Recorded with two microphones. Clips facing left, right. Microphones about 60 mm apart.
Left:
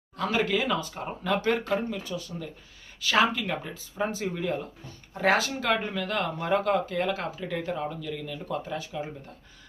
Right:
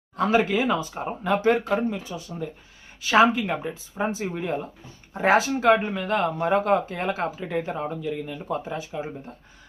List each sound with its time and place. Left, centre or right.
0.2 s speech: right